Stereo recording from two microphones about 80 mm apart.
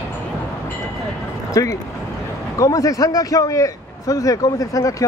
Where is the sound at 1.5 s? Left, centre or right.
Left.